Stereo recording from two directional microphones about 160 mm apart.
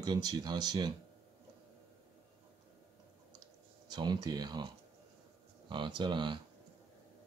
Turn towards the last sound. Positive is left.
turn(degrees=-30)  # may be behind; listen again after turning